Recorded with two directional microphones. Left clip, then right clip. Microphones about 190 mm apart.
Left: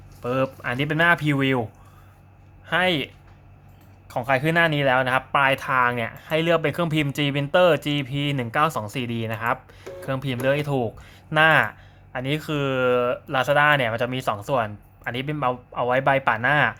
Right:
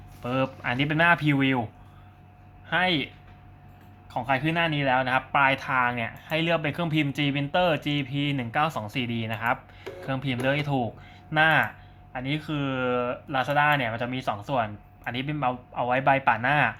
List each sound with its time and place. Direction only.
0.2 s speech: 15° left (ahead or behind)
2.6 s speech: 30° left (ahead or behind)
4.1 s speech: 35° left (ahead or behind)